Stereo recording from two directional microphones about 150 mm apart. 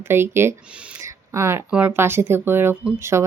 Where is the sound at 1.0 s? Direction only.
20° right (ahead or behind).